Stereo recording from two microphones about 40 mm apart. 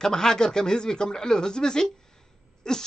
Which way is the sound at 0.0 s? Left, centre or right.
Centre.